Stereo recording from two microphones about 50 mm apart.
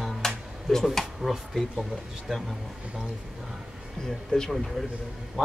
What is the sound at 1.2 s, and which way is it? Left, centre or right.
Speech, centre.